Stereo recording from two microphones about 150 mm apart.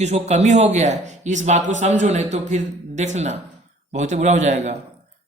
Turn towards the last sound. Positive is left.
turn(degrees=-50)  # may be behind; listen again after turning